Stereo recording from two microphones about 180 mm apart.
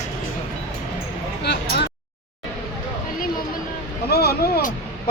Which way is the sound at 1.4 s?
65° left (ahead or behind).